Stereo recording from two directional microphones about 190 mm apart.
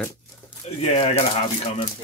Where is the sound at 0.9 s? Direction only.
35° left (ahead or behind).